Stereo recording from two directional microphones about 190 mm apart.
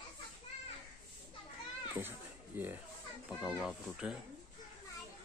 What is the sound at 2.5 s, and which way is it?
Speech, 10° right (ahead or behind).